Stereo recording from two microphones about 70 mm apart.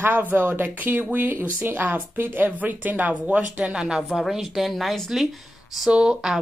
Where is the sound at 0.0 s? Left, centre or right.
Right; by 5.3 s centre.